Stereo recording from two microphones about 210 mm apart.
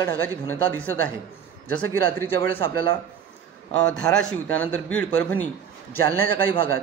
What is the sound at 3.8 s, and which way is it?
A man's voice, 5° left (ahead or behind).